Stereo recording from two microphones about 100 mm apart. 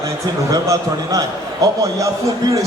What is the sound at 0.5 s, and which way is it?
Speech, 35° right (ahead or behind).